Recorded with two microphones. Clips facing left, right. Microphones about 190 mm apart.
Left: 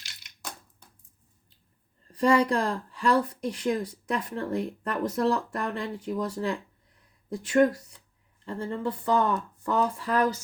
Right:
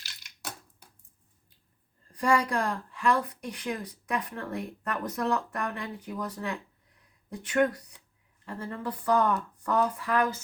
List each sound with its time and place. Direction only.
0.0 s crushing: 5° right (ahead or behind)
2.1 s speech: 30° left (ahead or behind)